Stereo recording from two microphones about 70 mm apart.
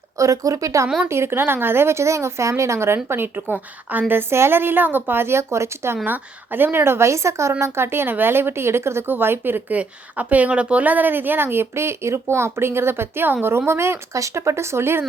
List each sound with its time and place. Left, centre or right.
0.2 s speech: right
1.0 s speech: right
3.4 s a woman's voice: right
4.1 s speech: right
6.1 s speech: right